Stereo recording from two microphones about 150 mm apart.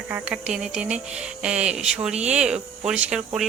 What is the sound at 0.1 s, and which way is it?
Speech, 10° right (ahead or behind).